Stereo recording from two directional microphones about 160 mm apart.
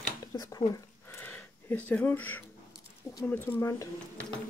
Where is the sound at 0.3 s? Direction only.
20° left (ahead or behind).